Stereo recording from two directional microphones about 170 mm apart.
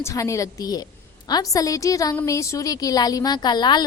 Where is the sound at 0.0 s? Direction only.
20° left (ahead or behind).